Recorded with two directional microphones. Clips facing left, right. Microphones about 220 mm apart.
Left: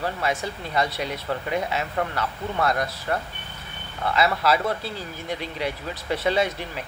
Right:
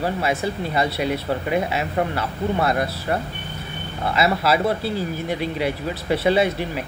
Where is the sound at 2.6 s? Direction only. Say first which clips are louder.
Even; 5° right (ahead or behind).